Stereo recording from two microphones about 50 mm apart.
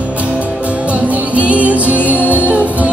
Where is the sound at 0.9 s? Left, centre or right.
Right.